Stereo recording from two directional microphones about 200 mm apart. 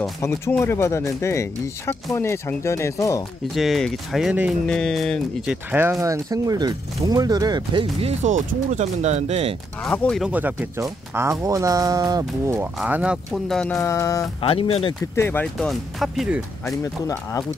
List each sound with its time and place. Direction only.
0.2 s speech: 10° left (ahead or behind)
3.5 s speech: centre (ahead or behind)
5.7 s speech: 10° right (ahead or behind); by 9.6 s 30° right (ahead or behind)
9.8 s speech: 5° left (ahead or behind); by 12.6 s 15° right (ahead or behind)
12.7 s speech: 5° right (ahead or behind); by 14.2 s 15° left (ahead or behind)
14.4 s speech: 30° left (ahead or behind)
15.1 s speech: 10° left (ahead or behind)
16.6 s speech: 15° left (ahead or behind)